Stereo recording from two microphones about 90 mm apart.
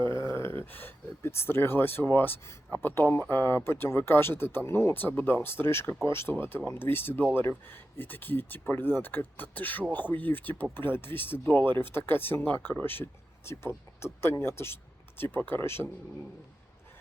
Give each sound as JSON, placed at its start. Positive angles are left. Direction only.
{"t": 0.1, "sound": "speech", "side_deg": 30}